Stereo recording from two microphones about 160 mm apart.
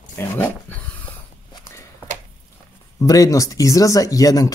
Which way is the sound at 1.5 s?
15° left (ahead or behind).